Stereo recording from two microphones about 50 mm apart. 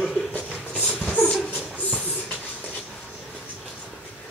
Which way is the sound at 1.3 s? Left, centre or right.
Centre.